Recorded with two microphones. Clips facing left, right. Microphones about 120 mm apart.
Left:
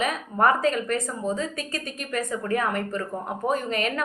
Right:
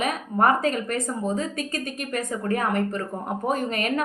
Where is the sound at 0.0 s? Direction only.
40° right (ahead or behind).